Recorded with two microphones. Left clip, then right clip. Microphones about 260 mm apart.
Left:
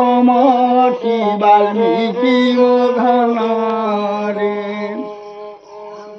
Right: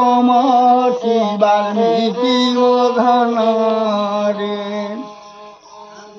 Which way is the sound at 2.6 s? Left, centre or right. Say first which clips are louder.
Right 1 dB; centre.